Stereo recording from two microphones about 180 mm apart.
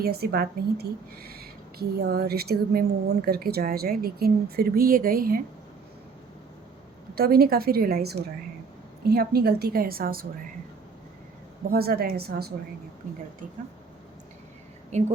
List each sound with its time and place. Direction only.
0.0 s a woman's voice: 60° right (ahead or behind)
7.2 s a woman's voice: 55° right (ahead or behind)
11.7 s a woman's voice: 60° right (ahead or behind)
14.9 s speech: 40° right (ahead or behind)